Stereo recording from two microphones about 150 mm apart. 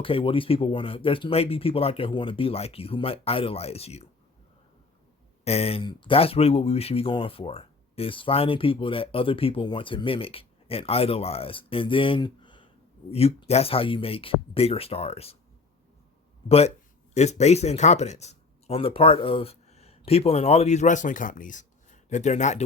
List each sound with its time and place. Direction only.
0.0 s speech: 35° left (ahead or behind)
5.5 s speech: 40° left (ahead or behind)
13.1 s speech: 40° left (ahead or behind)
16.5 s speech: 45° left (ahead or behind)